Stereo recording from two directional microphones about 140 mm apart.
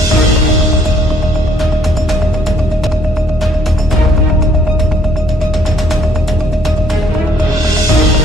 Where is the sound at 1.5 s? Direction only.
Centre (ahead or behind).